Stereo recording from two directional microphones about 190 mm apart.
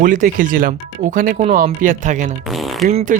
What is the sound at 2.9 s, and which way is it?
Speech, 45° right (ahead or behind).